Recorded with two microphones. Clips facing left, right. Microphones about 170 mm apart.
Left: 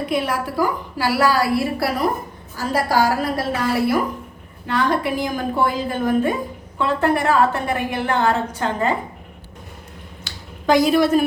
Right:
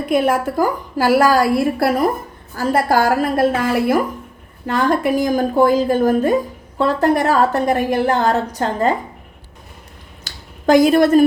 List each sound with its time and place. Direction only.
0.1 s a woman's voice: 50° right (ahead or behind)
4.6 s a woman's voice: 45° right (ahead or behind)
10.2 s a sound: 50° right (ahead or behind)